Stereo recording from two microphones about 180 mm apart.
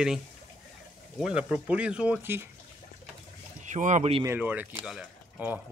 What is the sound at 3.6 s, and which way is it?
Speech, 40° right (ahead or behind).